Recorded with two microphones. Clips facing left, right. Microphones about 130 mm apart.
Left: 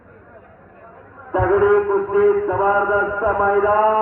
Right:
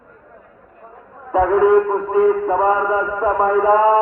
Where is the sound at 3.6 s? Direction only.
40° right (ahead or behind).